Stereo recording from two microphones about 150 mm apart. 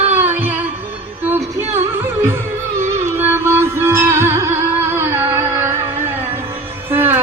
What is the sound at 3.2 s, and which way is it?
Music, 15° right (ahead or behind).